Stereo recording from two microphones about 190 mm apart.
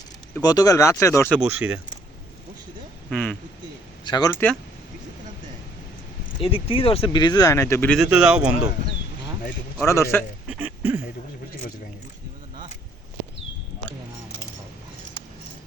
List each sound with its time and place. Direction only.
0.4 s speech: 20° left (ahead or behind)
1.4 s speech: 5° right (ahead or behind)
3.1 s speech: 5° left (ahead or behind)
4.0 s speech: 20° left (ahead or behind)
6.4 s speech: 30° left (ahead or behind); by 7.9 s 15° left (ahead or behind)
8.0 s speech: 5° right (ahead or behind)
9.8 s speech: 15° left (ahead or behind)
10.5 s a sound: 10° right (ahead or behind)